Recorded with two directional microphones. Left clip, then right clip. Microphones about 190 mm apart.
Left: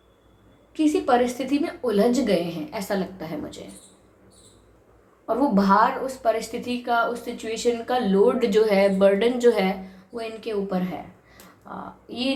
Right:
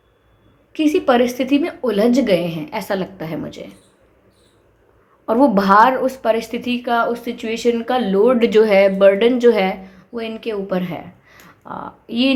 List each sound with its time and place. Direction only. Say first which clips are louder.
0.7 s a woman's voice: right 5 dB; 40° right (ahead or behind)
5.2 s a woman's voice: right 7 dB; 45° right (ahead or behind)